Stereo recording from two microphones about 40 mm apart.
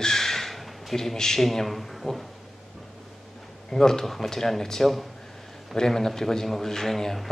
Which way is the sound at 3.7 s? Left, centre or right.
Centre.